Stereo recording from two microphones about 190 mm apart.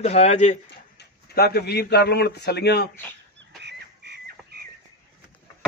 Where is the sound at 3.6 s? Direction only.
65° right (ahead or behind).